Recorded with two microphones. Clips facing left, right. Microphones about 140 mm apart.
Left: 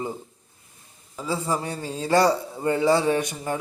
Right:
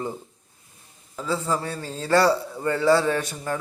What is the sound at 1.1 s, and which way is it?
A man's voice, 15° left (ahead or behind).